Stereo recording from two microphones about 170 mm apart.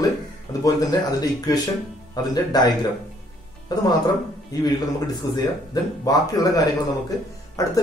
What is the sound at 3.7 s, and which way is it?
Speech, 20° left (ahead or behind).